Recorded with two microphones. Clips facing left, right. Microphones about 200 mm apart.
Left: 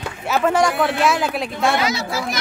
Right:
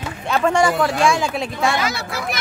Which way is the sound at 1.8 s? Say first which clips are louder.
Left 2 dB; 55° right (ahead or behind).